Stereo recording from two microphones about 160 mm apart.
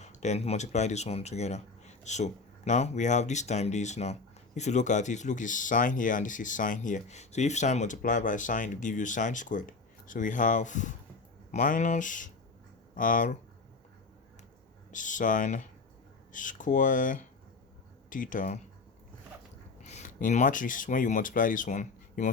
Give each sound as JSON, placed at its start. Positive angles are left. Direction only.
{"t": 0.0, "sound": "speech", "side_deg": 45}
{"t": 14.9, "sound": "speech", "side_deg": 50}
{"t": 19.8, "sound": "speech", "side_deg": 45}